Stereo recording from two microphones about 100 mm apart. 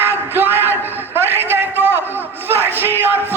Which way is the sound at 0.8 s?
20° right (ahead or behind).